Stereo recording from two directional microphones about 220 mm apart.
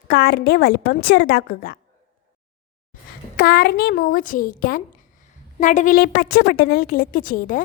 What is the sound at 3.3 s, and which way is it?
A woman's voice, 45° left (ahead or behind).